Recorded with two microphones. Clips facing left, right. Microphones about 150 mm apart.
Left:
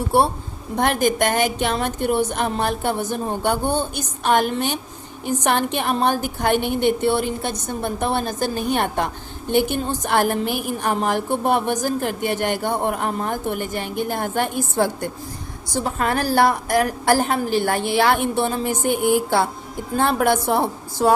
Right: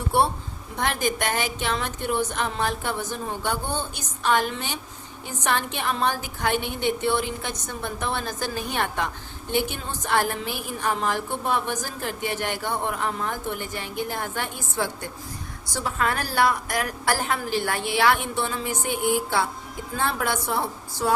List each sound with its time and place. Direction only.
0.8 s a woman's voice: 55° left (ahead or behind)
1.7 s a woman's voice: 45° left (ahead or behind)
10.8 s a woman's voice: 50° left (ahead or behind)
20.0 s a woman's voice: 65° left (ahead or behind)